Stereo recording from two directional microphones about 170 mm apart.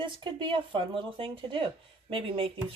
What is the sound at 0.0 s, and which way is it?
A woman's voice, 30° right (ahead or behind).